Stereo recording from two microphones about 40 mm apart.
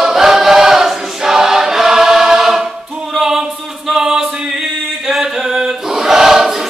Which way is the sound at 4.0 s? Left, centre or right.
Centre.